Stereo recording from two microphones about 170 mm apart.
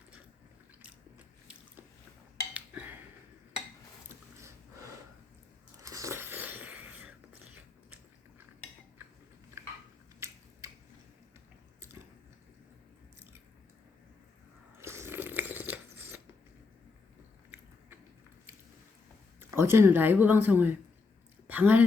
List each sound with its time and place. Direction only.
2.5 s a sound: 10° right (ahead or behind)
5.8 s biting: 20° right (ahead or behind)
10.2 s scissors: 15° right (ahead or behind)
14.8 s crunch: 15° right (ahead or behind)
19.4 s speech: 15° right (ahead or behind)
21.4 s a sound: 10° right (ahead or behind)